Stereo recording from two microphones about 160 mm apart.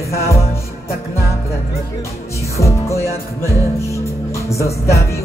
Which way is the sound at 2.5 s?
20° left (ahead or behind).